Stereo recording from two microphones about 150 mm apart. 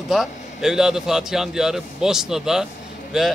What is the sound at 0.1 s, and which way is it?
A man's voice, centre (ahead or behind).